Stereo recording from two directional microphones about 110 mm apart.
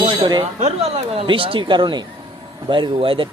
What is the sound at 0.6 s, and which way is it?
Speech, 70° right (ahead or behind).